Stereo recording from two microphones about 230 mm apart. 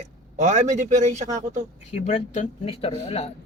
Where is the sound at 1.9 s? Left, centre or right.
Left.